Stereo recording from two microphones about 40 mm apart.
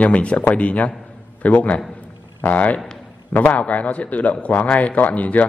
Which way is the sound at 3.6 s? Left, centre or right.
Left.